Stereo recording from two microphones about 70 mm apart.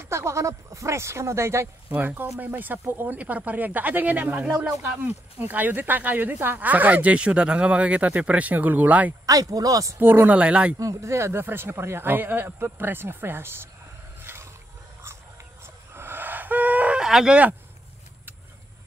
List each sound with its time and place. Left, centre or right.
0.0 s speech: right
1.9 s speech: right
4.6 s speech: centre
5.0 s speech: right
9.2 s speech: right
9.9 s speech: right
10.3 s speech: centre
10.8 s speech: right
14.2 s wild animals: right
15.6 s a sound: right
17.0 s speech: centre